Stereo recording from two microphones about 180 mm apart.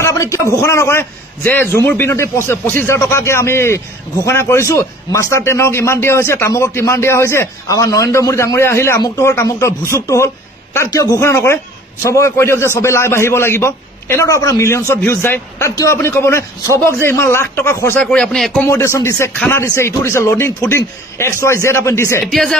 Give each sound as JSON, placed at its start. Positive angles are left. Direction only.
{"t": 0.0, "sound": "a sound", "side_deg": 15}
{"t": 0.6, "sound": "a man's voice", "side_deg": 15}
{"t": 18.7, "sound": "a man's voice", "side_deg": 15}
{"t": 22.3, "sound": "speech", "side_deg": 0}